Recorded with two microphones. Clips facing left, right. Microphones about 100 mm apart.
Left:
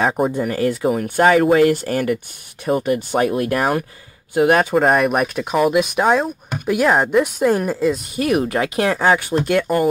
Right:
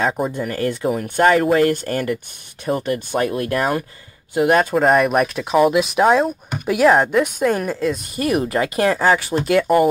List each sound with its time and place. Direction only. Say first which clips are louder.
0.0 s speech: left 2 dB; 10° left (ahead or behind)